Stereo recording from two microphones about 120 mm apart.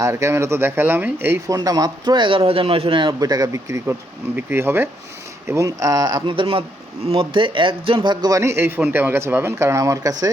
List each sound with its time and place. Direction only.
0.0 s speech: 25° right (ahead or behind)
1.5 s a man's voice: 35° right (ahead or behind)